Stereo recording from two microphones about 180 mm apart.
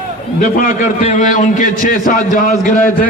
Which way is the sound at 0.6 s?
40° left (ahead or behind).